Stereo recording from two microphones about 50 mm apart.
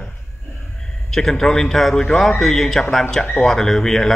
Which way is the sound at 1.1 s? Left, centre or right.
Centre.